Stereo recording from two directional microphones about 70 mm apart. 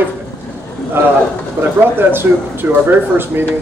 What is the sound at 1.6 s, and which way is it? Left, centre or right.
Speech, right.